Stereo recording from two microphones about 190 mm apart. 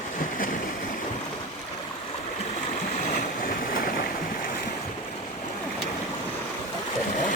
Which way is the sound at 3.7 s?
50° left (ahead or behind).